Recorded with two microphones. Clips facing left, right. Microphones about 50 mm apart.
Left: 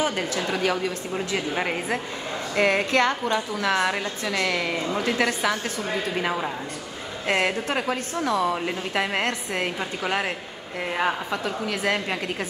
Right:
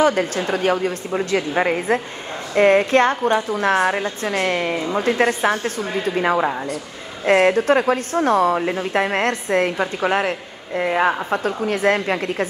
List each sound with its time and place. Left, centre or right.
0.0 s a woman's voice: right
1.5 s a woman's voice: right
9.8 s a woman's voice: right
11.2 s a woman's voice: right